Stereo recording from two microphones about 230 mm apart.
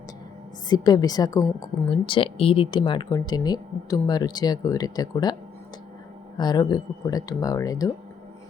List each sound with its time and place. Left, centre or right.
0.7 s speech: centre